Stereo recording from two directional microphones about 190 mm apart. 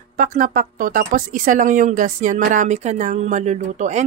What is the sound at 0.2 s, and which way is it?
Speech, 45° right (ahead or behind).